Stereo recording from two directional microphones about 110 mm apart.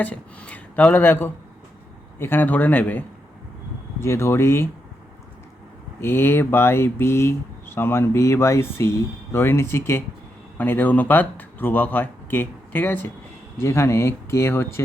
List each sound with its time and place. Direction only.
0.0 s speech: 10° left (ahead or behind)
4.0 s speech: 25° left (ahead or behind)
6.0 s speech: 20° left (ahead or behind)